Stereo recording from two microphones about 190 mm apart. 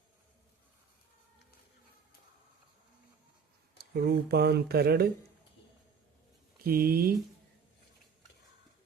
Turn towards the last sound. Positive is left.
turn(degrees=-50)  # may be behind; listen again after turning